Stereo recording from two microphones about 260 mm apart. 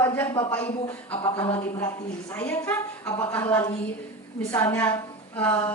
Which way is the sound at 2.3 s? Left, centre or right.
Centre.